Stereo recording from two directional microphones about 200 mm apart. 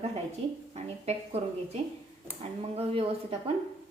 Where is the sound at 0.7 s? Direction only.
30° right (ahead or behind).